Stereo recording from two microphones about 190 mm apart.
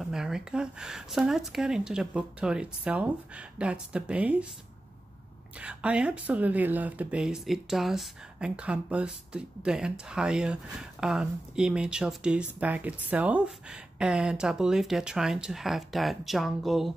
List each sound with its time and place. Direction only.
0.0 s speech: 5° right (ahead or behind)
5.6 s speech: 5° right (ahead or behind)